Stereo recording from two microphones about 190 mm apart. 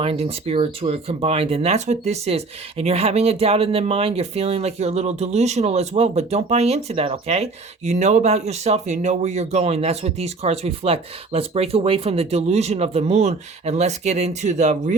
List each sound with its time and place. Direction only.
0.0 s speech: 30° right (ahead or behind)